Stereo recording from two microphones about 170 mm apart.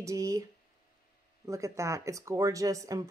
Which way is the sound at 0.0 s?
20° right (ahead or behind).